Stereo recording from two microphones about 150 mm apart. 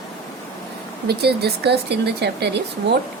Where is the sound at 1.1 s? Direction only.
90° right.